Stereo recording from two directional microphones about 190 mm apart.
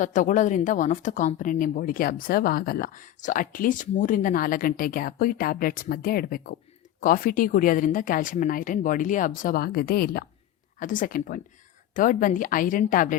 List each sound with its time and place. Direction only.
0.0 s speech: 40° left (ahead or behind)